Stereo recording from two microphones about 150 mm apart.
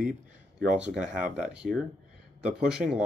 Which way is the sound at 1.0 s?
55° right (ahead or behind).